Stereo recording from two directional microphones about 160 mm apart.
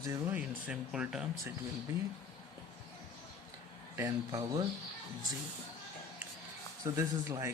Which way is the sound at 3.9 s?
20° right (ahead or behind).